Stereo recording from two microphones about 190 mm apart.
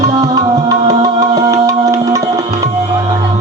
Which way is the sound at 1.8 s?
20° right (ahead or behind).